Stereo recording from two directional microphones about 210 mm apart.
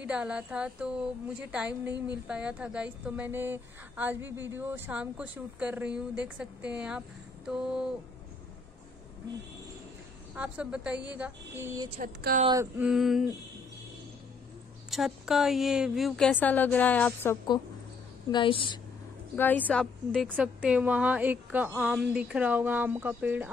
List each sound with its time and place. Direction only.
0.0 s a woman's voice: 5° right (ahead or behind)
10.3 s a woman's voice: 5° right (ahead or behind)
12.0 s speech: 40° right (ahead or behind)
12.4 s a woman's voice: 15° right (ahead or behind)
12.8 s a woman's voice: centre (ahead or behind)
14.9 s a woman's voice: centre (ahead or behind)
18.3 s a woman's voice: 25° left (ahead or behind)
19.3 s a woman's voice: 10° left (ahead or behind); by 23.5 s 10° right (ahead or behind)